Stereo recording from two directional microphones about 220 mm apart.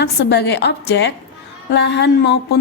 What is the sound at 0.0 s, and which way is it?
A woman's voice, 50° left (ahead or behind).